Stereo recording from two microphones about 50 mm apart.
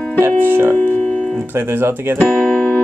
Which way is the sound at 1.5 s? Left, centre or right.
Right.